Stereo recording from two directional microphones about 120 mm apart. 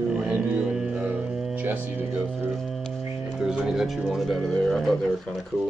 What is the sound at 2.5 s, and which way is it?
Music, centre (ahead or behind).